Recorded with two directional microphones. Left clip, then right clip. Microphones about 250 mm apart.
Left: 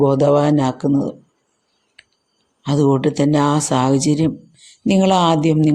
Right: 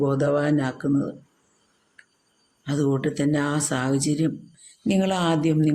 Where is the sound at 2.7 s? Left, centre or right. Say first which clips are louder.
Left 8 dB; left.